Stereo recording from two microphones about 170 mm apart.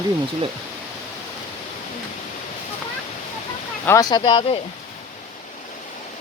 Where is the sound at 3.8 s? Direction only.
20° left (ahead or behind).